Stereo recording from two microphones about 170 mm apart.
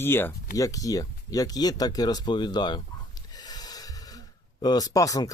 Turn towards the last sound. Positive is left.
turn(degrees=20)  # may be behind; listen again after turning